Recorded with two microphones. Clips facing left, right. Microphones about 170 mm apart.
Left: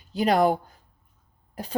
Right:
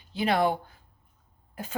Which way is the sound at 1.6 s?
35° left (ahead or behind).